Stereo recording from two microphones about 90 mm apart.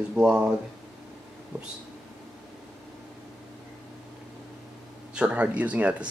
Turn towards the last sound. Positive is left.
turn(degrees=-15)  # may be behind; listen again after turning